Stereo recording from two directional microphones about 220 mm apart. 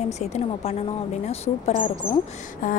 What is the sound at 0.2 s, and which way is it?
Speech, 30° left (ahead or behind).